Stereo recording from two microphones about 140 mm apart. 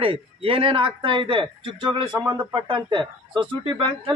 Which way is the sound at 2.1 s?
15° right (ahead or behind).